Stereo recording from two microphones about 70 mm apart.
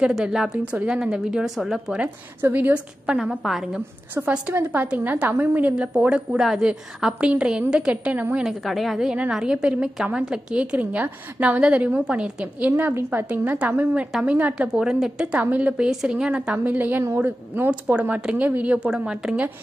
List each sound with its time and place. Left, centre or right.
0.0 s a woman's voice: centre
2.5 s speech: right
3.1 s a woman's voice: centre
4.9 s speech: right
5.8 s a woman's voice: centre
8.5 s a woman's voice: centre
9.3 s a woman's voice: centre
12.7 s speech: right
14.7 s a woman's voice: centre
15.5 s speech: centre
15.9 s a woman's voice: centre